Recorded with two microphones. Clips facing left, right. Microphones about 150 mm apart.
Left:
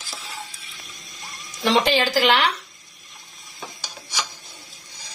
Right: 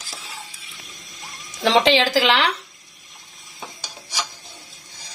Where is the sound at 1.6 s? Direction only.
90° right.